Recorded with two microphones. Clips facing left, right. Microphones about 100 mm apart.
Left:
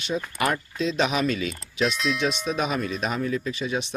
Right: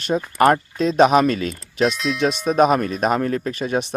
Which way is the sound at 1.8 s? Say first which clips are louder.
Right 5 dB; centre (ahead or behind).